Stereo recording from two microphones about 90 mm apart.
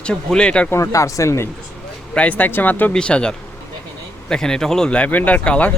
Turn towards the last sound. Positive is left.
turn(degrees=15)  # may be behind; listen again after turning